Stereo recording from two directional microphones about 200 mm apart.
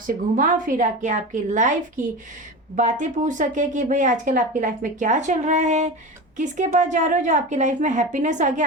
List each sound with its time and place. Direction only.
0.1 s speech: 40° right (ahead or behind)
2.7 s speech: 40° right (ahead or behind)